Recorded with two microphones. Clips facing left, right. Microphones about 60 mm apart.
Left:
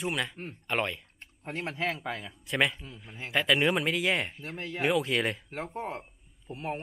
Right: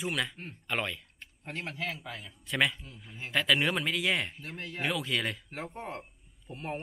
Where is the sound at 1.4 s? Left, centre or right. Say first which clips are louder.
Left 4 dB; left.